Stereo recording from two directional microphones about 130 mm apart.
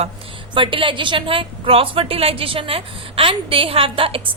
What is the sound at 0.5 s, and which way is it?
A woman's voice, 40° right (ahead or behind).